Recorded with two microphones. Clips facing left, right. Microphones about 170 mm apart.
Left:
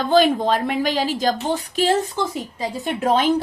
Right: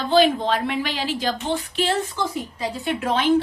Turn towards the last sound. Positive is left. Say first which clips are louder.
# left 2 dB
turn(degrees=40)  # may be behind; listen again after turning